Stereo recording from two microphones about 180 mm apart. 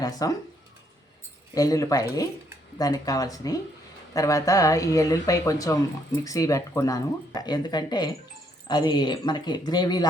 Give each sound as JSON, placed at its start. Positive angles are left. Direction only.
{"t": 0.0, "sound": "speech", "side_deg": 20}
{"t": 1.5, "sound": "speech", "side_deg": 20}